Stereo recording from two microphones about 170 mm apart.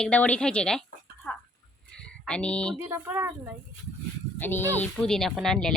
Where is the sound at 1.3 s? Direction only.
5° left (ahead or behind).